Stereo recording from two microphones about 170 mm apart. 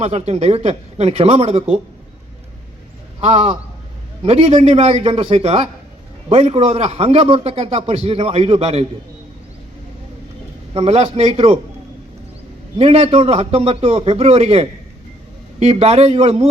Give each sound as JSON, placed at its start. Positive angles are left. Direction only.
{"t": 0.0, "sound": "a man's voice", "side_deg": -40}
{"t": 3.2, "sound": "a man's voice", "side_deg": -35}
{"t": 10.8, "sound": "a man's voice", "side_deg": -35}
{"t": 12.8, "sound": "a man's voice", "side_deg": -35}